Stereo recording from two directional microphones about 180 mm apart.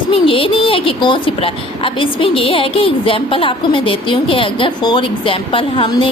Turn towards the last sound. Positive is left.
turn(degrees=30)  # may be behind; listen again after turning